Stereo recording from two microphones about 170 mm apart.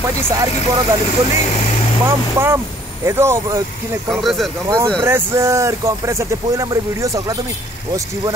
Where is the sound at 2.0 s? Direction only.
15° right (ahead or behind).